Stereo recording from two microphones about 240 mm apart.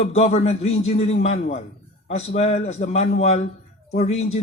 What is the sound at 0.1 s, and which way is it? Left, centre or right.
Speech, left.